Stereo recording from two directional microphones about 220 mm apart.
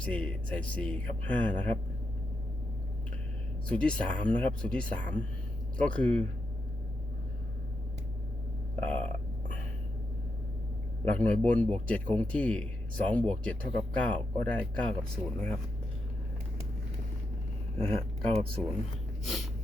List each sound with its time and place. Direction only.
0.0 s a man's voice: 5° left (ahead or behind)
3.7 s a man's voice: 5° left (ahead or behind)
8.8 s burping: 5° left (ahead or behind)
11.0 s a man's voice: 5° left (ahead or behind)
17.7 s speech: 25° right (ahead or behind)